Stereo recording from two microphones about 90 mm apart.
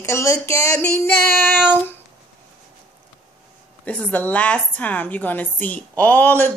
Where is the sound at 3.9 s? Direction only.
15° left (ahead or behind).